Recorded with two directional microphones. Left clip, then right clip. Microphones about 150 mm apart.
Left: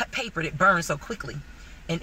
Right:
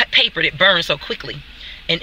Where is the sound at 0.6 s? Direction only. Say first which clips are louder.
Right 5 dB; 20° right (ahead or behind).